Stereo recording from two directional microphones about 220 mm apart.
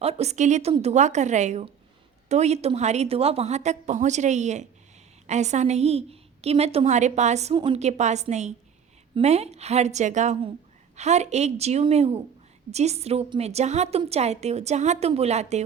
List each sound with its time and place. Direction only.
0.0 s a woman's voice: 30° right (ahead or behind)